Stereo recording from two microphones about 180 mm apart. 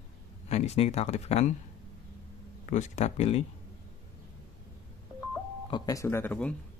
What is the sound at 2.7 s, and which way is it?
Speech, 40° left (ahead or behind).